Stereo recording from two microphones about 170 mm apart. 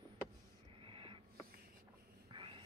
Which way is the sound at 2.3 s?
30° right (ahead or behind).